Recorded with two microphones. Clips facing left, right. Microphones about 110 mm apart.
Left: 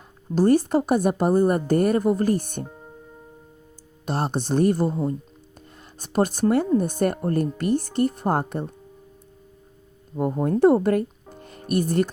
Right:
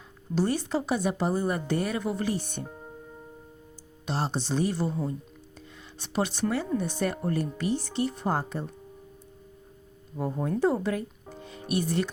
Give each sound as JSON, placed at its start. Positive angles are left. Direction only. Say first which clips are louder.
{"t": 0.3, "sound": "a woman's voice", "louder": "left 9 dB", "side_deg": 50}
{"t": 2.6, "sound": "music", "louder": "even", "side_deg": 0}
{"t": 4.0, "sound": "a woman's voice", "louder": "left 5 dB", "side_deg": 50}
{"t": 10.2, "sound": "speech", "louder": "left 7 dB", "side_deg": 50}
{"t": 11.3, "sound": "music", "louder": "left 5 dB", "side_deg": 50}